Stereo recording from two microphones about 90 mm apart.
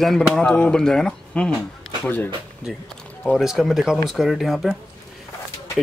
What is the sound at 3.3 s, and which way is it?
Speech, centre (ahead or behind).